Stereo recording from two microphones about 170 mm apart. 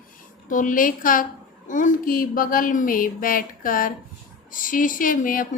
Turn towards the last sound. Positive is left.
turn(degrees=55)  # may be behind; listen again after turning